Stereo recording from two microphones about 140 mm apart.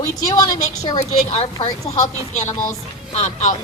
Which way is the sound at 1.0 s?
45° left (ahead or behind).